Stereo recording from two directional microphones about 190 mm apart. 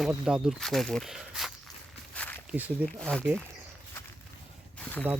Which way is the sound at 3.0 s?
5° left (ahead or behind).